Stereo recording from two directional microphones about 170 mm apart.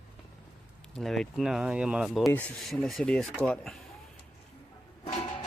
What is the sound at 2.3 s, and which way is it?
Speech, 10° left (ahead or behind).